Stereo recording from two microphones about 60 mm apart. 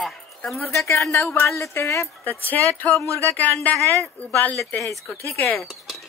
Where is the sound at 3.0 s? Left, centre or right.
Right.